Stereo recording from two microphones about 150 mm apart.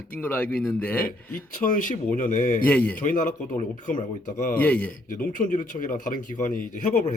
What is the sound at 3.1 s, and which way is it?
Speech, 60° left (ahead or behind).